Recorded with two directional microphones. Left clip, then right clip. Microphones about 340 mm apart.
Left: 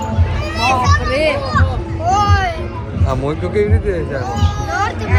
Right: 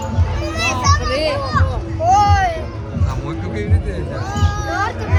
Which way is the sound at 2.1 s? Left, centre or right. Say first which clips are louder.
Right 2 dB; right.